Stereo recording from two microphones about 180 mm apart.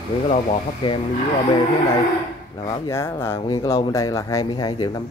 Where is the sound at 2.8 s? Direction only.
15° left (ahead or behind).